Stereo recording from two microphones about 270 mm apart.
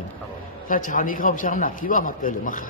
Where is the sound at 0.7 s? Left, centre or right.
Left.